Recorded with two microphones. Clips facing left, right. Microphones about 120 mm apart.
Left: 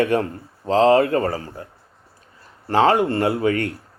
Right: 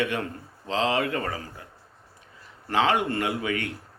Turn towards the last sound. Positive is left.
turn(degrees=40)  # may be behind; listen again after turning